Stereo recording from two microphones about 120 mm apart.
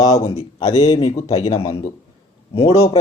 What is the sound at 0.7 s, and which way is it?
Speech, 65° left (ahead or behind).